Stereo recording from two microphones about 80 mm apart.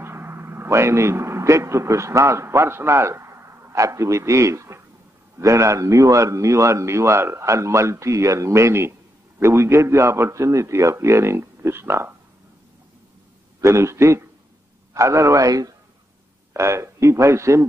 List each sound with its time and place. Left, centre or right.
0.0 s a man's voice: right
13.6 s a man's voice: right
16.5 s a man's voice: right